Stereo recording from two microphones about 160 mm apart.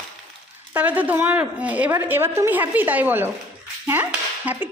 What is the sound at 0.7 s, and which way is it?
A woman's voice, 10° right (ahead or behind).